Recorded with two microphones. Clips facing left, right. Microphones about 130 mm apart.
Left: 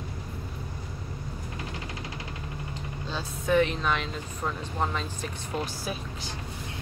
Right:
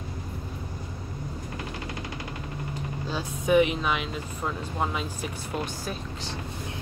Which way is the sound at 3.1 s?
15° right (ahead or behind).